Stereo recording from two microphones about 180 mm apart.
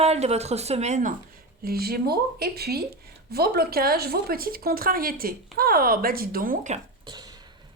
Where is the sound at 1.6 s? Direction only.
55° right (ahead or behind).